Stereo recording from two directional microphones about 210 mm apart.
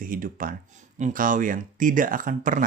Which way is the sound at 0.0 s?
40° right (ahead or behind).